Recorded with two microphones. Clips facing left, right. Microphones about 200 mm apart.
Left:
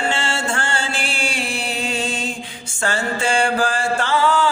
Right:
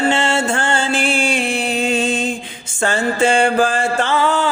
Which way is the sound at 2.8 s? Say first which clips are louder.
Right 5 dB; 20° right (ahead or behind).